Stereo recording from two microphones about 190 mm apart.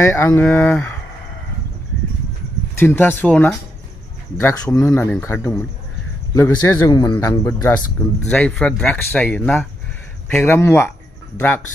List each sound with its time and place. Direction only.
0.0 s speech: 15° left (ahead or behind)
2.8 s speech: 10° left (ahead or behind)